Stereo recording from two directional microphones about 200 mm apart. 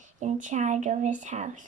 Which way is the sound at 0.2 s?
35° right (ahead or behind).